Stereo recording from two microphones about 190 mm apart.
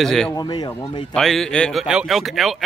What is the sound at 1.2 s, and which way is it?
Speech, centre (ahead or behind).